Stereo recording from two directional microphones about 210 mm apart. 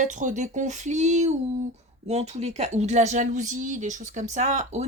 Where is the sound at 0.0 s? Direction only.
35° right (ahead or behind).